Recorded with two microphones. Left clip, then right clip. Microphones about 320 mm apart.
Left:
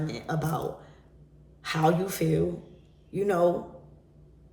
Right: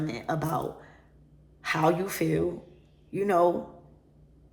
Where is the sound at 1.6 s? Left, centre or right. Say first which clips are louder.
Even; centre.